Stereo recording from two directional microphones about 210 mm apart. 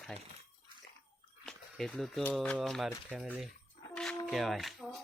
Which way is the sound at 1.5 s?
Centre (ahead or behind).